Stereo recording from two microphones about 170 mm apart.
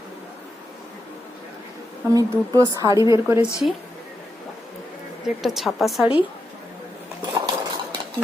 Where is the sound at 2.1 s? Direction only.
20° right (ahead or behind).